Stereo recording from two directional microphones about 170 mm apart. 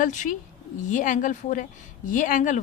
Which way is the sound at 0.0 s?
45° left (ahead or behind).